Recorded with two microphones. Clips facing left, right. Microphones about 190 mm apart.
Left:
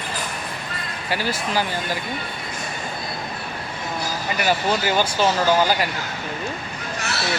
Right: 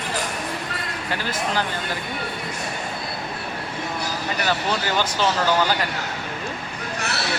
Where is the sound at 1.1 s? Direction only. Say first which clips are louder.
Left 2 dB; 10° left (ahead or behind).